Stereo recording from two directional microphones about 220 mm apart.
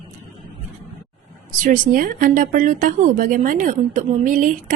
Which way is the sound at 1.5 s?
40° right (ahead or behind).